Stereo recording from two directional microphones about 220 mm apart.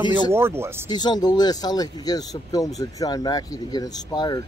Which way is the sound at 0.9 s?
20° left (ahead or behind).